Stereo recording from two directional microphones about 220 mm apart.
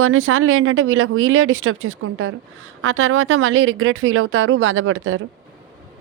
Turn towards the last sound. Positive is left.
turn(degrees=-65)  # may be behind; listen again after turning